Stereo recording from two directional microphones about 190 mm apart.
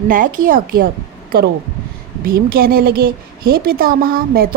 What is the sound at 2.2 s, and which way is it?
A woman's voice, 50° right (ahead or behind).